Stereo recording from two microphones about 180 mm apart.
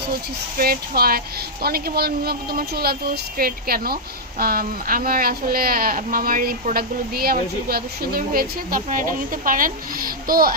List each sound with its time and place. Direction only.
0.5 s a woman's voice: 55° right (ahead or behind)